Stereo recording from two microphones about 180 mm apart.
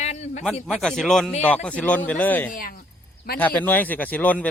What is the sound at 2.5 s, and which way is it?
Speech, 50° left (ahead or behind).